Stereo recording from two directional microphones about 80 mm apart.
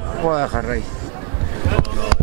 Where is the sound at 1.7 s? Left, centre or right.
Centre.